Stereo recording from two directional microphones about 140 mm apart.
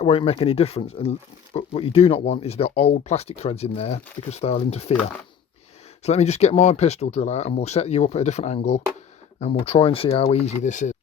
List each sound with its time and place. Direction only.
0.0 s speech: 45° left (ahead or behind)
6.0 s speech: 50° left (ahead or behind)